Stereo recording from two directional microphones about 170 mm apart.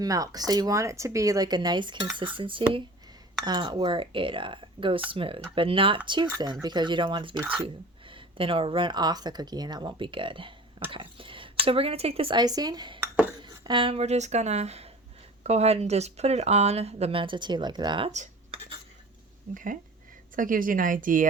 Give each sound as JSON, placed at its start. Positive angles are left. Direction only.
{"t": 0.0, "sound": "speech", "side_deg": -20}
{"t": 7.3, "sound": "speech", "side_deg": -10}
{"t": 8.1, "sound": "speech", "side_deg": -30}
{"t": 13.0, "sound": "a sound", "side_deg": -10}
{"t": 13.4, "sound": "speech", "side_deg": -30}
{"t": 18.1, "sound": "cutlery", "side_deg": -45}
{"t": 19.5, "sound": "a woman's voice", "side_deg": -50}